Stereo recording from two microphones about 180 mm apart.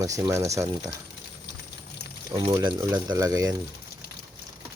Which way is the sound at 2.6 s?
25° right (ahead or behind).